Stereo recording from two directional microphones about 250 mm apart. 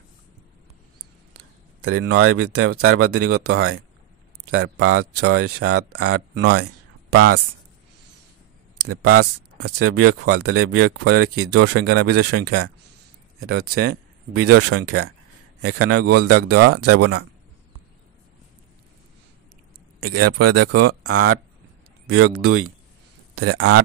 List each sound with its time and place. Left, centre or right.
1.8 s speech: right
6.4 s a sound: right
9.0 s a man's voice: right
20.0 s a man's voice: right
21.0 s speech: right
22.4 s speech: right